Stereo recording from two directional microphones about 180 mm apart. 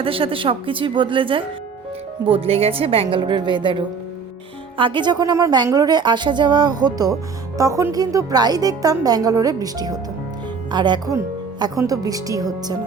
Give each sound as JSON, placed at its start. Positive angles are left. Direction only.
{"t": 0.0, "sound": "a woman's voice", "side_deg": -30}